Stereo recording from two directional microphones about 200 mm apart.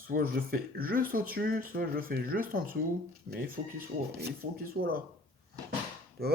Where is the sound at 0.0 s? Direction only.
45° right (ahead or behind).